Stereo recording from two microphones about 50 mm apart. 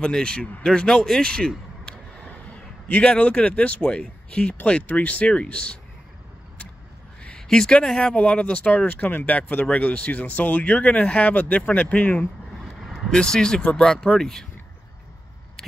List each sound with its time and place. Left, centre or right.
0.0 s speech: centre
3.0 s speech: left
7.3 s a sound: centre
8.0 s speech: centre
8.8 s speech: left
12.8 s vehicle: centre
13.1 s speech: centre